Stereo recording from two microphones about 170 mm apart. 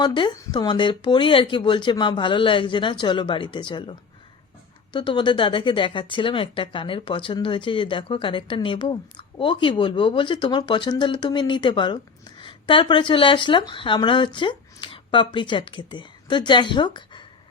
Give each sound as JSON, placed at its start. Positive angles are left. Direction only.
{"t": 0.0, "sound": "speech", "side_deg": 25}